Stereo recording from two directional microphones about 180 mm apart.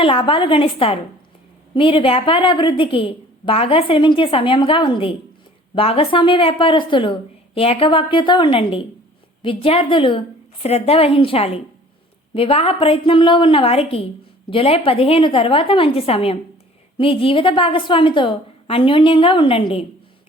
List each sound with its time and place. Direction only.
0.0 s a woman's voice: 30° left (ahead or behind)